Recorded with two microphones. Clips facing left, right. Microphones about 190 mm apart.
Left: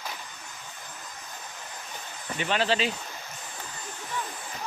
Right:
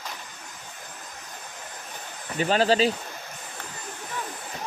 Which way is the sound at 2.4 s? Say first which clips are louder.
Right 6 dB; 40° right (ahead or behind).